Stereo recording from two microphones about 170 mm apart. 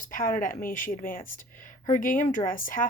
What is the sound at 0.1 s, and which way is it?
Speech, 55° left (ahead or behind).